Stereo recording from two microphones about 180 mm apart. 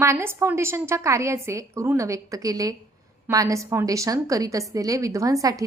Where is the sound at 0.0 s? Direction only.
15° right (ahead or behind).